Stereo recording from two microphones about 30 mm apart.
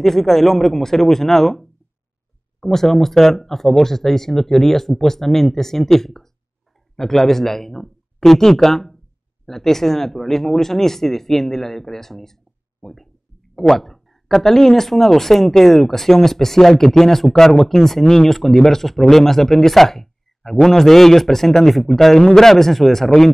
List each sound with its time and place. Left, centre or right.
0.0 s speech: centre
13.6 s speech: centre